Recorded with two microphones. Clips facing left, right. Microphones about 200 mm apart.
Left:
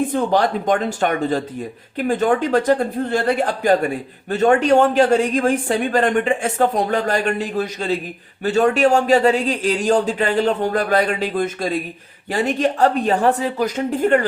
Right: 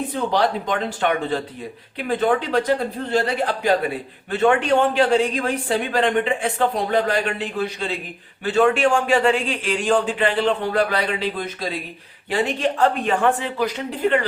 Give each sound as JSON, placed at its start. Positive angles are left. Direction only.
{"t": 0.1, "sound": "a man's voice", "side_deg": 50}